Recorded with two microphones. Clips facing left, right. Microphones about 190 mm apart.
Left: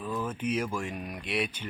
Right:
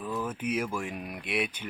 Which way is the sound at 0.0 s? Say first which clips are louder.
Even; 10° right (ahead or behind).